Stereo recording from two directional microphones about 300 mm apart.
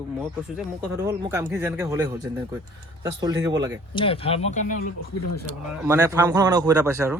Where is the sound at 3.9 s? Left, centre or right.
Centre.